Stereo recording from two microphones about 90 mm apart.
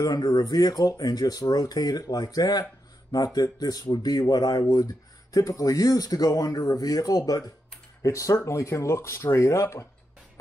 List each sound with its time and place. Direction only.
0.0 s speech: 45° left (ahead or behind)